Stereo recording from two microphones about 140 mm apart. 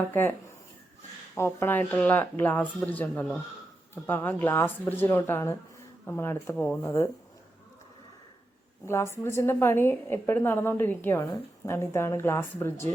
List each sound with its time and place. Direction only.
0.1 s a woman's voice: 15° left (ahead or behind)
1.4 s a woman's voice: 20° left (ahead or behind)
9.1 s a woman's voice: 20° left (ahead or behind)